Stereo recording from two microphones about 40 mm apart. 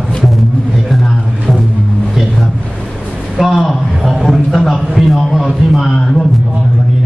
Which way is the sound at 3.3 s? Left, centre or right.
Centre.